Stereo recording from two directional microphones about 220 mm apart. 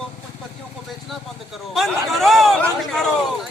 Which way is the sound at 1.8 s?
Centre (ahead or behind).